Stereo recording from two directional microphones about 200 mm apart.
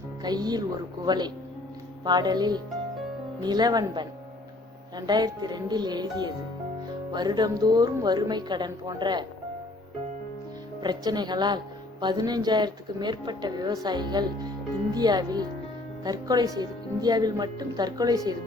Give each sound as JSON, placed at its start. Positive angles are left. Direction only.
{"t": 0.2, "sound": "speech", "side_deg": -20}
{"t": 10.8, "sound": "speech", "side_deg": -20}